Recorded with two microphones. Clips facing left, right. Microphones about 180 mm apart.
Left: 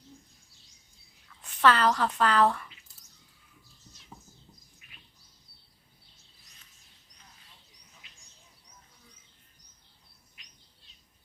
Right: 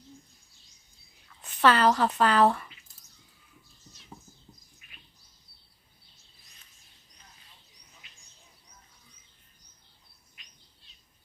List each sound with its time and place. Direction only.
1.4 s a sound: 5° right (ahead or behind)
1.9 s a woman's voice: 25° right (ahead or behind)
2.1 s speech: 5° right (ahead or behind)